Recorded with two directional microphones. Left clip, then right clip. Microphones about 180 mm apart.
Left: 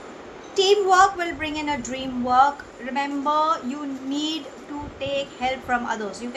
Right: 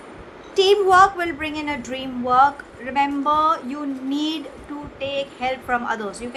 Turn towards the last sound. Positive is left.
turn(degrees=-30)  # may be behind; listen again after turning